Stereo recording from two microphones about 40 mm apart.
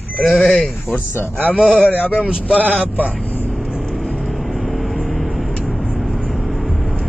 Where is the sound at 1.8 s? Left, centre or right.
Left.